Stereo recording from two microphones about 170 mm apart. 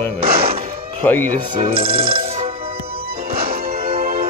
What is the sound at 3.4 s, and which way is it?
Music, 60° right (ahead or behind).